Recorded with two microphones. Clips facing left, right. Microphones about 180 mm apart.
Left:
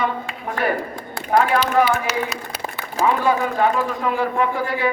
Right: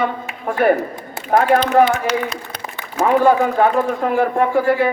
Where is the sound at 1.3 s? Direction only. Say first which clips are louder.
Right 3 dB; 45° right (ahead or behind).